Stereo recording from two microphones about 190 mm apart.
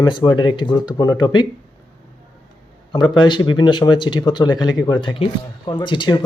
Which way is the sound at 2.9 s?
25° left (ahead or behind).